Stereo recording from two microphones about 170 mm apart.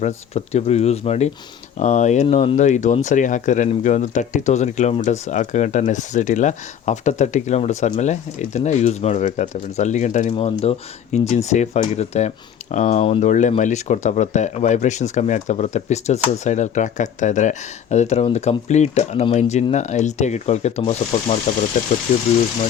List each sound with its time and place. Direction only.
0.0 s speech: 40° left (ahead or behind)
21.7 s speech: 50° left (ahead or behind)